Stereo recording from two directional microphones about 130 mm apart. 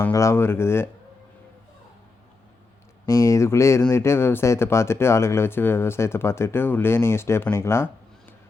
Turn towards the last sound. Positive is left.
turn(degrees=20)  # may be behind; listen again after turning